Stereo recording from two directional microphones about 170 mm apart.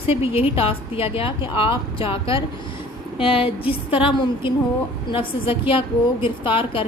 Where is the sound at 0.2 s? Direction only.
35° left (ahead or behind).